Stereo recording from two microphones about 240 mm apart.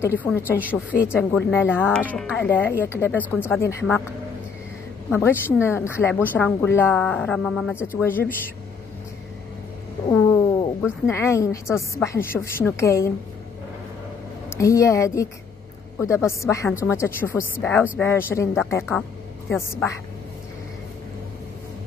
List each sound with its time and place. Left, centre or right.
0.2 s a woman's voice: centre
5.1 s a woman's voice: centre
10.0 s a sound: centre
10.8 s a woman's voice: centre
14.6 s a woman's voice: centre